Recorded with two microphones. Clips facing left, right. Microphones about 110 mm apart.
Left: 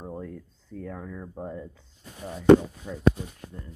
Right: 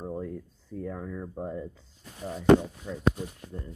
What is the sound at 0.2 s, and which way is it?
Speech, 20° right (ahead or behind).